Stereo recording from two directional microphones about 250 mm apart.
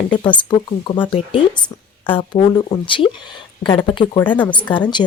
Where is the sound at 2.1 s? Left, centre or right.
Centre.